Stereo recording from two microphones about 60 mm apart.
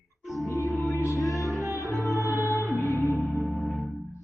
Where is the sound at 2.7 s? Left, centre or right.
Left.